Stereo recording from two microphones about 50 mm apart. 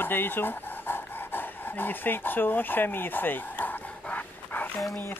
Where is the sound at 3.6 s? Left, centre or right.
Left.